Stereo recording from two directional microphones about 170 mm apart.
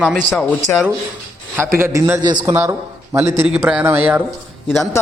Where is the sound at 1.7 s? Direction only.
15° right (ahead or behind).